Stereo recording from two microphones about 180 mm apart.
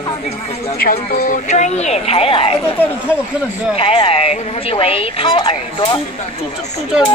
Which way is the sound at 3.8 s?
30° left (ahead or behind).